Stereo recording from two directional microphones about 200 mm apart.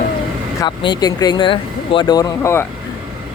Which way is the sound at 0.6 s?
25° left (ahead or behind).